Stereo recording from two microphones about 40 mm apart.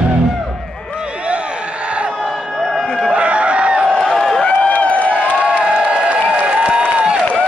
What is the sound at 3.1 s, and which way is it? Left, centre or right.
Chicken, right.